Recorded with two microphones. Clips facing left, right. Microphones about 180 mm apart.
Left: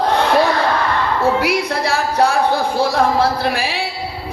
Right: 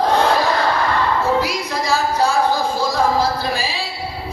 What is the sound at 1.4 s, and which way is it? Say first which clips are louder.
A man's voice: left 3 dB; 60° left (ahead or behind).